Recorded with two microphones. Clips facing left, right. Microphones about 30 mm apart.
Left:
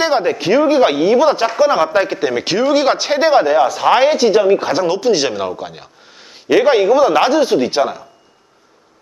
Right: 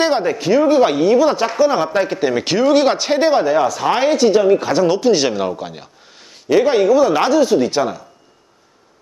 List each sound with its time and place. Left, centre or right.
0.0 s speech: centre
3.3 s speech: left; by 5.9 s centre
6.5 s speech: left